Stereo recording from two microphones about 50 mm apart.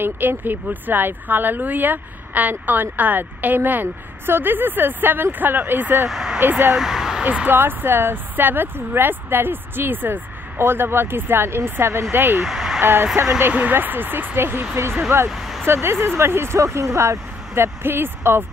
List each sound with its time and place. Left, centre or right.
0.0 s speech: right
6.0 s speech: centre
6.4 s speech: right
6.8 s a sound: centre
7.2 s speech: right
12.4 s a sound: centre
12.8 s speech: right
13.5 s speech: right
15.2 s vehicle: centre
15.6 s speech: right
16.5 s speech: right